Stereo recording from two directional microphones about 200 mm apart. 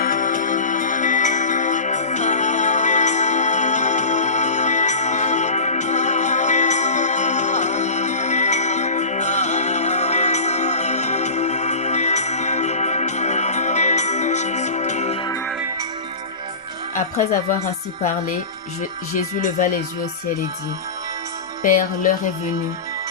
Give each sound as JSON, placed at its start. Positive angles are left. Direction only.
{"t": 0.0, "sound": "music", "side_deg": 40}
{"t": 16.9, "sound": "a woman's voice", "side_deg": 35}
{"t": 21.6, "sound": "speech", "side_deg": 40}